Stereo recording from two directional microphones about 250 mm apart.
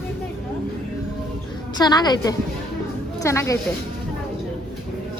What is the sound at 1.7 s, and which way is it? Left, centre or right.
A woman's voice, centre.